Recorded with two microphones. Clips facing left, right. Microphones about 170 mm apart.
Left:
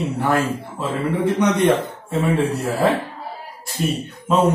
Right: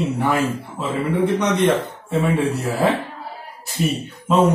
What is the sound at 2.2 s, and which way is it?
Speech, centre (ahead or behind).